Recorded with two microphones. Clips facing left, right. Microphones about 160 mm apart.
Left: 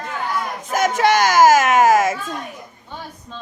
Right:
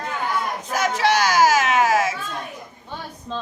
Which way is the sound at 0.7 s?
50° left (ahead or behind).